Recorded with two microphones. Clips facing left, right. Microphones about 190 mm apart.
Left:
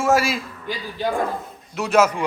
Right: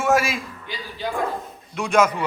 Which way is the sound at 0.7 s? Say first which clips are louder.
Left 7 dB; 40° left (ahead or behind).